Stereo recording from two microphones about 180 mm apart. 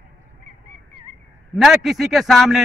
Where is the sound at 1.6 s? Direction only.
Centre (ahead or behind).